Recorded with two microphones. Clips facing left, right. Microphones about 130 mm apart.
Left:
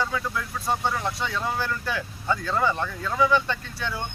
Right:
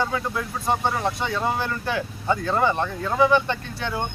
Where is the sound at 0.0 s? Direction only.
20° right (ahead or behind).